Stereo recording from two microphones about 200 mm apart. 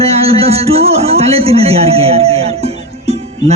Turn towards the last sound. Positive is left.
turn(degrees=-30)  # may be behind; listen again after turning